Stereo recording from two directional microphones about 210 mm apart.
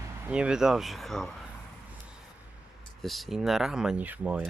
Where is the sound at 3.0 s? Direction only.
Centre (ahead or behind).